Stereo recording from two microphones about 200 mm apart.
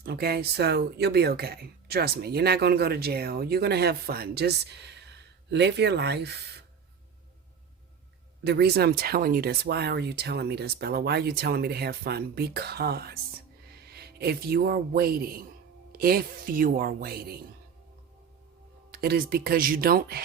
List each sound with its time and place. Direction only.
0.0 s speech: 55° right (ahead or behind)
8.4 s speech: 55° right (ahead or behind)
18.9 s speech: 50° right (ahead or behind)